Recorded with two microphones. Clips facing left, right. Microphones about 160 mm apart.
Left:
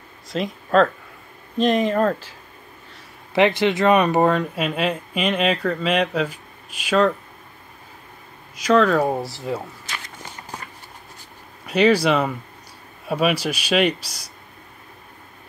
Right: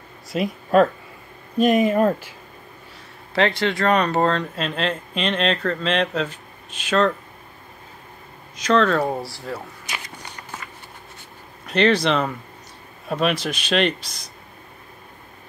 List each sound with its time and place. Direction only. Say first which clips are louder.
0.3 s speech: right 1 dB; 10° right (ahead or behind)
3.3 s speech: left 3 dB; 20° left (ahead or behind)
8.6 s speech: left 2 dB; 5° left (ahead or behind)
9.0 s speech: left 2 dB; 20° left (ahead or behind)
11.6 s speech: left 2 dB; 10° left (ahead or behind)